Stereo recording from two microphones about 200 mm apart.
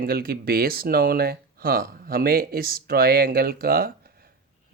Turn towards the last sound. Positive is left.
turn(degrees=-50)  # may be behind; listen again after turning